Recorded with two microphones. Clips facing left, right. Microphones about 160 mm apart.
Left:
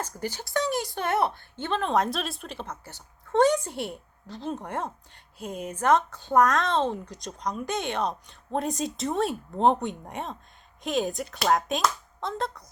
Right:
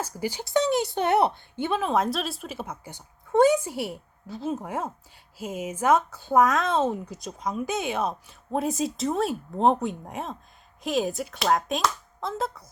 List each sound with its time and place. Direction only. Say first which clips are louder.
0.0 s speech: right 3 dB; 10° right (ahead or behind)